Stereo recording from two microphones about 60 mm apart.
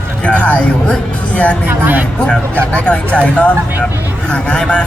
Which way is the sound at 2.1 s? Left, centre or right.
Centre.